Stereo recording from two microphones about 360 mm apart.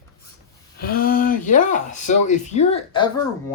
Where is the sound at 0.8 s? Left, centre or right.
Left.